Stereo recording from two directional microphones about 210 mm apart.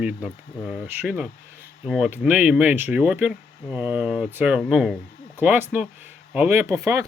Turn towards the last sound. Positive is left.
turn(degrees=-15)  # may be behind; listen again after turning